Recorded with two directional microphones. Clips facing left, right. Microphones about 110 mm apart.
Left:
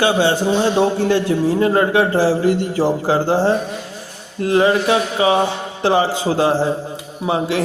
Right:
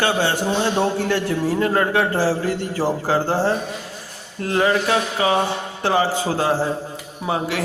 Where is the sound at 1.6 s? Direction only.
15° left (ahead or behind).